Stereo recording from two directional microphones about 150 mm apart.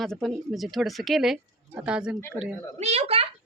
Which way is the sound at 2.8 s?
45° right (ahead or behind).